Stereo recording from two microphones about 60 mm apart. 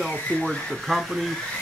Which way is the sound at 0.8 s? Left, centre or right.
Centre.